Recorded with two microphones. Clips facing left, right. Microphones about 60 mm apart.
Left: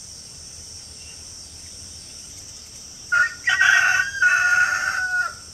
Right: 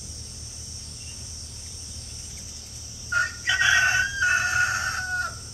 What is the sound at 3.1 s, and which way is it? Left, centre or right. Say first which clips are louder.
Crowing: left 5 dB; left.